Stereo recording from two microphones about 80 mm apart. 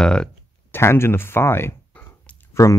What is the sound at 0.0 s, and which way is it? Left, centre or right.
Speech, centre.